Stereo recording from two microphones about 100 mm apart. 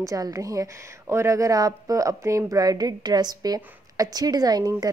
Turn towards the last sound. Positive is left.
turn(degrees=-40)  # may be behind; listen again after turning